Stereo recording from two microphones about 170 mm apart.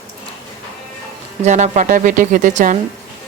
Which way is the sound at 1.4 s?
45° right (ahead or behind).